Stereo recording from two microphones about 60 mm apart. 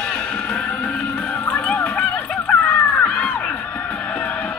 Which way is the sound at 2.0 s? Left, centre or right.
Left.